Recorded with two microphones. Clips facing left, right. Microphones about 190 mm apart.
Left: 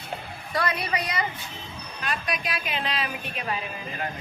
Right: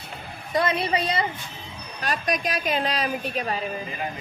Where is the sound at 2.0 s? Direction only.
40° right (ahead or behind).